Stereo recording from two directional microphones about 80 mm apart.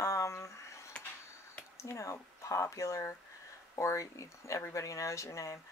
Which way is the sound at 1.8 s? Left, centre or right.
Left.